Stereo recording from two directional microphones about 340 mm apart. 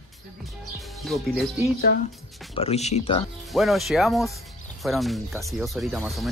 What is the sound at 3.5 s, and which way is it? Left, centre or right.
Speech, centre.